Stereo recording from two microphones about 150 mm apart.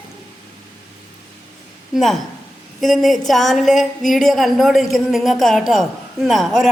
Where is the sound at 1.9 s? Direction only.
Centre (ahead or behind).